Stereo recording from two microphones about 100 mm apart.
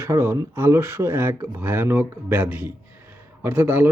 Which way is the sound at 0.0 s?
25° right (ahead or behind).